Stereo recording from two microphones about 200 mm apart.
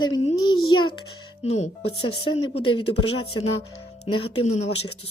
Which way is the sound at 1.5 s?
30° left (ahead or behind).